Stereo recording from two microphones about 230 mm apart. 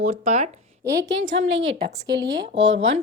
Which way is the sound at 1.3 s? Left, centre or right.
Right.